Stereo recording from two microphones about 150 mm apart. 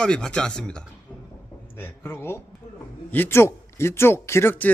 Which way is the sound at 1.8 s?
15° left (ahead or behind).